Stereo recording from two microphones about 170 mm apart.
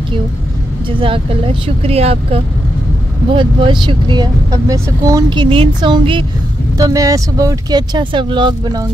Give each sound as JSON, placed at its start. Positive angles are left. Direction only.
{"t": 0.9, "sound": "speech", "side_deg": -30}